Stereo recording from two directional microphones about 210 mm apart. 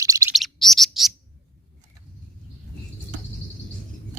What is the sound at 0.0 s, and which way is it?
Bird, 15° right (ahead or behind).